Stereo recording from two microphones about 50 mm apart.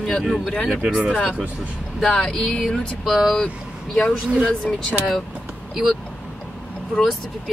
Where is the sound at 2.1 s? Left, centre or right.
Centre.